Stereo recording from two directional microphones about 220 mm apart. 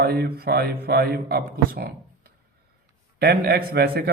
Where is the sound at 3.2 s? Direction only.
45° right (ahead or behind).